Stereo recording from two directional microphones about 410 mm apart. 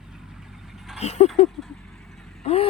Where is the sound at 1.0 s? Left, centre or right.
Centre.